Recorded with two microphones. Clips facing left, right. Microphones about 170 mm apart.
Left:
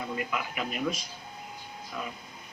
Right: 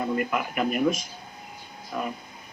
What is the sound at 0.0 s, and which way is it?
A man's voice, 50° right (ahead or behind).